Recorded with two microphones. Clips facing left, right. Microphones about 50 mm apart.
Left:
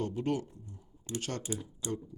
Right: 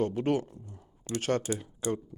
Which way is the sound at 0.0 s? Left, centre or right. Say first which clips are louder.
Right 5 dB; right.